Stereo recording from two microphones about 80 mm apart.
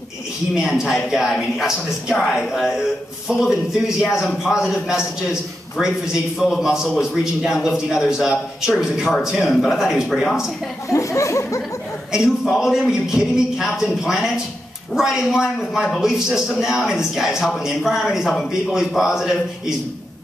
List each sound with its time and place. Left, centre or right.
0.6 s a man's voice: centre
10.9 s a sound: left
12.1 s a man's voice: centre